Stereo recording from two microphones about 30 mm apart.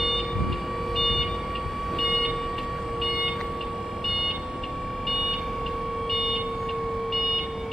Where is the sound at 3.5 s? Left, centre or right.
Centre.